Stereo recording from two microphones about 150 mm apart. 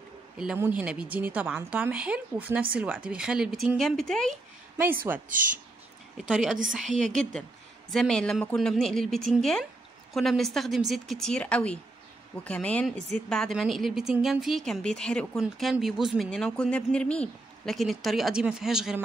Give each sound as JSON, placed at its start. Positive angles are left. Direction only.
{"t": 0.6, "sound": "a woman's voice", "side_deg": -10}
{"t": 5.1, "sound": "a woman's voice", "side_deg": -15}
{"t": 6.1, "sound": "speech", "side_deg": -5}
{"t": 6.9, "sound": "a woman's voice", "side_deg": -55}
{"t": 7.9, "sound": "speech", "side_deg": 5}